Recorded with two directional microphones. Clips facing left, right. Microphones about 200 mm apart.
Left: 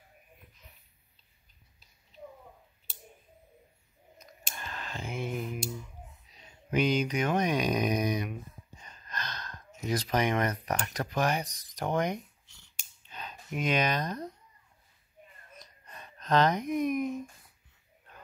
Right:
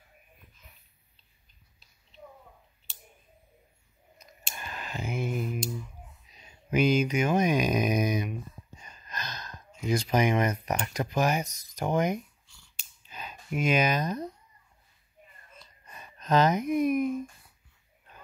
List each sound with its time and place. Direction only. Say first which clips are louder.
4.6 s a sound: right 2 dB; 10° right (ahead or behind)
6.7 s speech: right 3 dB; 5° right (ahead or behind)
8.8 s gasp: even; 10° right (ahead or behind)
10.0 s speech: right 3 dB; 10° right (ahead or behind)
12.4 s finger snapping: right 1 dB; 20° left (ahead or behind)
13.1 s speech: right 3 dB; 5° right (ahead or behind)
15.9 s speech: right 2 dB; 5° right (ahead or behind)